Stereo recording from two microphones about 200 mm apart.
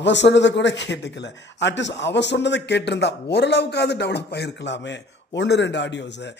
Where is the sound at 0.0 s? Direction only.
60° left (ahead or behind).